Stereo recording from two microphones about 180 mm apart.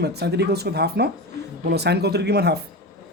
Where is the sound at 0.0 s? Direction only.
65° right (ahead or behind).